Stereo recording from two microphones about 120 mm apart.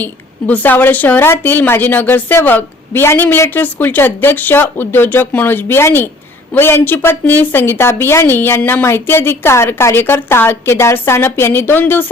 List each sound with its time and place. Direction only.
0.0 s a woman's voice: 15° left (ahead or behind)